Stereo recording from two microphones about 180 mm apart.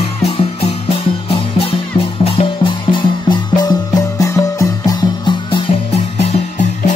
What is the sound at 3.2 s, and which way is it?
Music, 25° left (ahead or behind).